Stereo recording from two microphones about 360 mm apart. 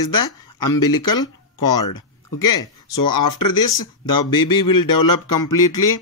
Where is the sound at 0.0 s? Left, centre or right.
Left.